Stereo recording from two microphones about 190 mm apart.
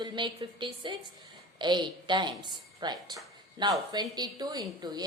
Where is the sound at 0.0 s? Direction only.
25° right (ahead or behind).